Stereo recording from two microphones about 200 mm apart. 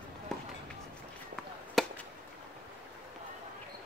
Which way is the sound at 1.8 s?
Centre (ahead or behind).